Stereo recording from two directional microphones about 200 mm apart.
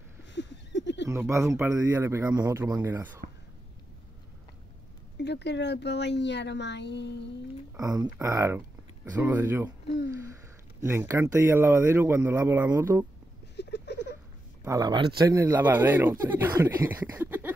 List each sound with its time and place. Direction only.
0.3 s a sound: 60° left (ahead or behind)
1.0 s speech: 15° right (ahead or behind)
5.1 s speech: 60° left (ahead or behind)
7.8 s speech: 15° right (ahead or behind)
10.8 s speech: 15° right (ahead or behind)
13.6 s a sound: 55° left (ahead or behind)
14.6 s speech: 20° right (ahead or behind)